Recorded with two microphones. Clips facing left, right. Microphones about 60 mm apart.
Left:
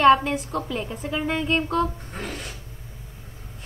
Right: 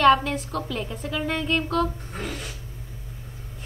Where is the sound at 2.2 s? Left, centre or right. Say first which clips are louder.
Even; left.